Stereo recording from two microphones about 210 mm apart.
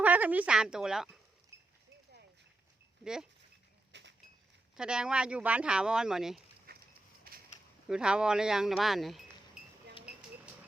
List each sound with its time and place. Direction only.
0.0 s a woman's voice: 5° right (ahead or behind)
1.5 s clip-clop: 10° right (ahead or behind)
3.0 s speech: 5° right (ahead or behind)
3.9 s goat: 55° right (ahead or behind)
4.8 s speech: 5° right (ahead or behind)
6.7 s a sound: 45° right (ahead or behind)
7.9 s speech: 5° right (ahead or behind)